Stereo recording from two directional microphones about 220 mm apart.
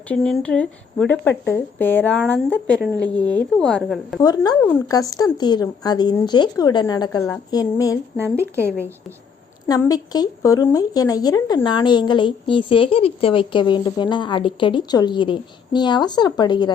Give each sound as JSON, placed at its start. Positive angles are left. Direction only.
{"t": 0.1, "sound": "a woman's voice", "side_deg": 5}
{"t": 4.2, "sound": "speech", "side_deg": 20}
{"t": 8.2, "sound": "speech", "side_deg": -10}
{"t": 9.9, "sound": "speech", "side_deg": 15}